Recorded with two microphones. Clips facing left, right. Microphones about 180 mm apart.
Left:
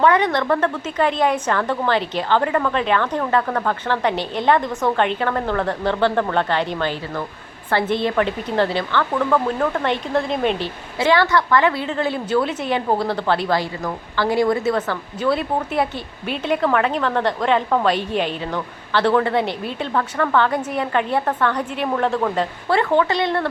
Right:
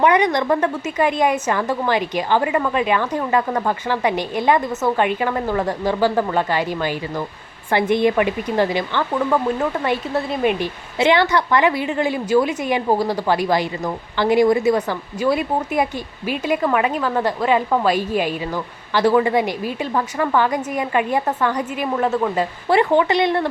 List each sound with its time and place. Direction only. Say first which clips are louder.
0.0 s a woman's voice: right 1 dB; 15° right (ahead or behind)
10.9 s a woman's voice: right 1 dB; 20° right (ahead or behind); by 22.4 s 5° right (ahead or behind)
22.7 s a woman's voice: right 2 dB; 15° right (ahead or behind)